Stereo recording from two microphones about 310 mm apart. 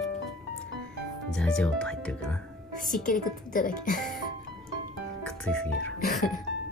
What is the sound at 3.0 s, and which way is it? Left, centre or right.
Speech, left.